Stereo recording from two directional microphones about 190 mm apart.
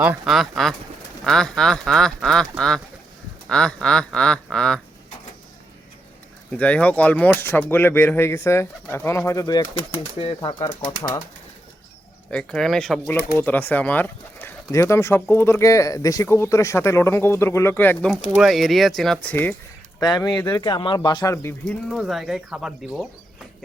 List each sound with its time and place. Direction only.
0.0 s speech: 5° right (ahead or behind)
6.5 s speech: 5° left (ahead or behind); by 10.7 s 25° left (ahead or behind)
12.3 s speech: 5° left (ahead or behind)
21.7 s speech: centre (ahead or behind)